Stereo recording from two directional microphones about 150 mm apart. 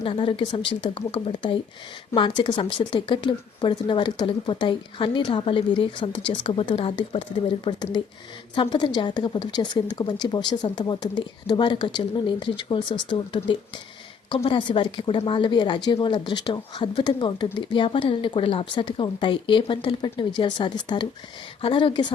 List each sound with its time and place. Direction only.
0.0 s a woman's voice: 35° left (ahead or behind)